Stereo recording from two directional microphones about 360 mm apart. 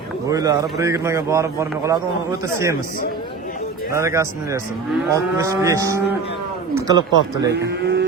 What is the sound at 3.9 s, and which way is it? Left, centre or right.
Speech, centre.